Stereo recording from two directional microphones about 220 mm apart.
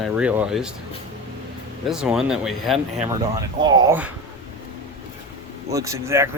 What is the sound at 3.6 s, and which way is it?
Speech, 20° right (ahead or behind).